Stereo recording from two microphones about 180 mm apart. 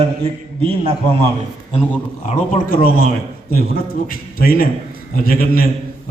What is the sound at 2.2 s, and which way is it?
Speech, 50° left (ahead or behind).